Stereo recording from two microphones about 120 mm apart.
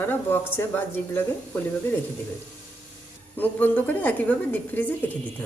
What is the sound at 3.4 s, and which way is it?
Speech, 15° left (ahead or behind).